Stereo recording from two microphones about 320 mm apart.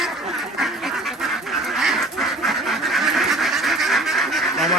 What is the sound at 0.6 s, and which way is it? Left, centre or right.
Duck, centre.